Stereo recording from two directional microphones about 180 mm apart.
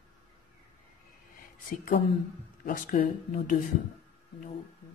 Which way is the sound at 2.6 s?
50° left (ahead or behind).